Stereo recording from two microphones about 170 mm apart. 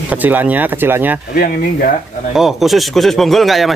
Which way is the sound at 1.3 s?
70° left (ahead or behind).